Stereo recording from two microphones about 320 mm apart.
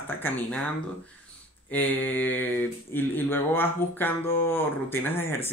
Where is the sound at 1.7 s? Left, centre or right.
Centre.